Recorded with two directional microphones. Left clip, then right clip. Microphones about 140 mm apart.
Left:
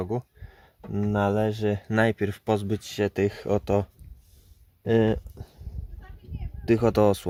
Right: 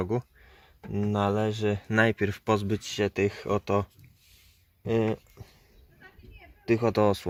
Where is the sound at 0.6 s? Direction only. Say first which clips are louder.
Left 1 dB; 30° left (ahead or behind); by 5.4 s 45° left (ahead or behind).